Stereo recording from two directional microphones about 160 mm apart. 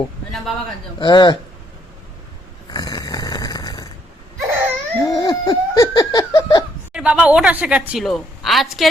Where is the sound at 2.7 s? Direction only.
25° left (ahead or behind).